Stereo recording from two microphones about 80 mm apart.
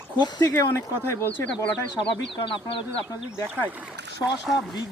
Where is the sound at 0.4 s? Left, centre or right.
Left.